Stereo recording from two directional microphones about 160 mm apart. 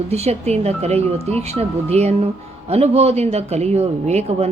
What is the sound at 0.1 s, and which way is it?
Speech, 40° right (ahead or behind).